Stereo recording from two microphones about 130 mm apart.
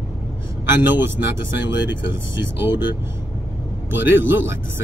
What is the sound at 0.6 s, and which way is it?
Speech, 15° right (ahead or behind).